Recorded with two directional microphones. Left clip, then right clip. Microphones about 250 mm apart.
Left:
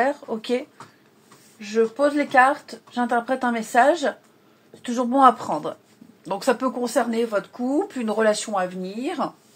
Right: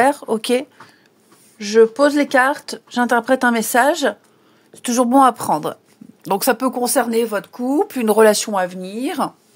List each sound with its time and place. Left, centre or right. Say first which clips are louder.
0.0 s a woman's voice: right 7 dB; right